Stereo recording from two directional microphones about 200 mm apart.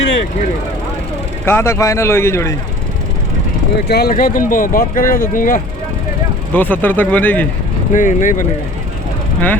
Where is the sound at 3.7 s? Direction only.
55° left (ahead or behind).